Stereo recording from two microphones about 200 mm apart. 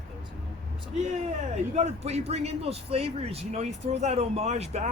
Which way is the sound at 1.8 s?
30° right (ahead or behind).